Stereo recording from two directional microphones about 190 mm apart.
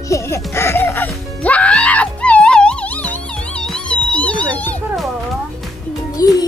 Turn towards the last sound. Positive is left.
turn(degrees=20)  # may be behind; listen again after turning